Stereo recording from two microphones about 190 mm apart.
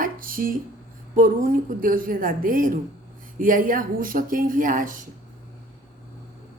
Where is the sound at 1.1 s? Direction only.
45° right (ahead or behind).